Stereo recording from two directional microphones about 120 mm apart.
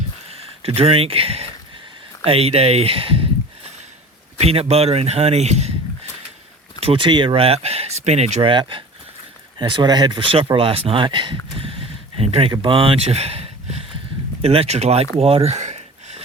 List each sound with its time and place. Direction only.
0.3 s speech: 55° right (ahead or behind)
4.4 s a man's voice: 60° right (ahead or behind)
6.7 s speech: 50° right (ahead or behind); by 8.4 s 70° right (ahead or behind)
8.4 s a man's voice: 45° right (ahead or behind); by 15.0 s 60° right (ahead or behind)
15.2 s a sound: 55° right (ahead or behind)